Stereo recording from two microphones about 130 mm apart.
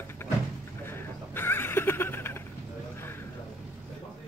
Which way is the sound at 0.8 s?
15° left (ahead or behind).